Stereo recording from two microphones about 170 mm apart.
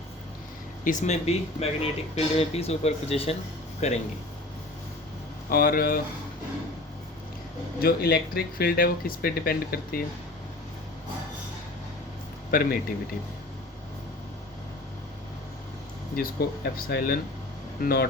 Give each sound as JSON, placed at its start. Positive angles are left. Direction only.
{"t": 0.9, "sound": "speech", "side_deg": 45}
{"t": 5.5, "sound": "speech", "side_deg": 60}
{"t": 7.8, "sound": "speech", "side_deg": 65}
{"t": 12.5, "sound": "speech", "side_deg": 60}
{"t": 16.7, "sound": "speech", "side_deg": 60}